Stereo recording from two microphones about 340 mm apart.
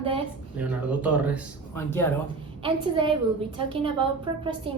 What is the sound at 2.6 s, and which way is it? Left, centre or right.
Speech, centre.